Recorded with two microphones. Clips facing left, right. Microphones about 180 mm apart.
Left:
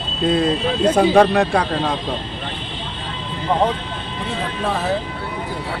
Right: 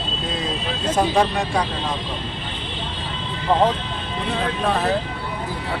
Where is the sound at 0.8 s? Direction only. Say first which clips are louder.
Left 6 dB; 65° left (ahead or behind).